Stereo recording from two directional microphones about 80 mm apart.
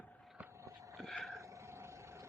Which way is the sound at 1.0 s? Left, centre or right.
Centre.